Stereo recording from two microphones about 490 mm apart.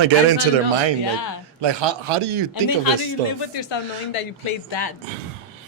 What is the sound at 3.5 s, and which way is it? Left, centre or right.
A woman's voice, left.